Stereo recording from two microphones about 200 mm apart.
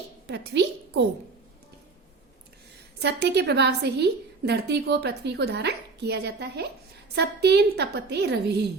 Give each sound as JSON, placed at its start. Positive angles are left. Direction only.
{"t": 0.3, "sound": "a woman's voice", "side_deg": -55}
{"t": 3.0, "sound": "a woman's voice", "side_deg": -55}